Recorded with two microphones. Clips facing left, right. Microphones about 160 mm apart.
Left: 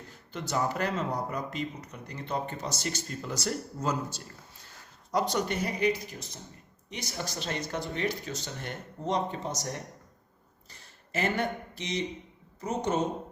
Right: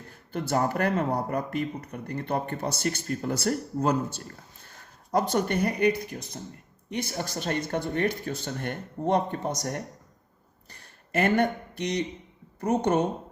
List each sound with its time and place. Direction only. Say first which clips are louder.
0.1 s speech: right 6 dB; 55° right (ahead or behind)
10.7 s a sound: right 6 dB; 60° right (ahead or behind)
12.5 s speech: right 5 dB; 60° right (ahead or behind)